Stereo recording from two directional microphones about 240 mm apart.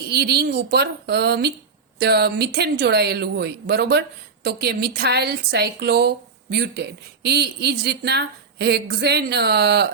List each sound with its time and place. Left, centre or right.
0.1 s a woman's voice: right